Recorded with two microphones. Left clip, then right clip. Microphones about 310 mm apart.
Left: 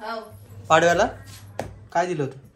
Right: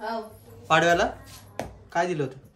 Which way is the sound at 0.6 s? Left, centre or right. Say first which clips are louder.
Left 3 dB; centre.